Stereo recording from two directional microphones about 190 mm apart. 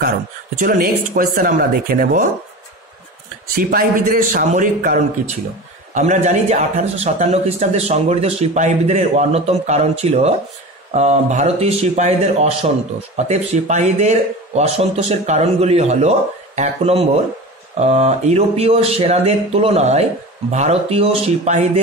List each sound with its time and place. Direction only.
0.6 s speech: 50° right (ahead or behind)
3.5 s speech: 50° right (ahead or behind)